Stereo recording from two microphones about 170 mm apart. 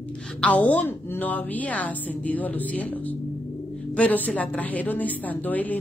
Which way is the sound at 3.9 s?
10° left (ahead or behind).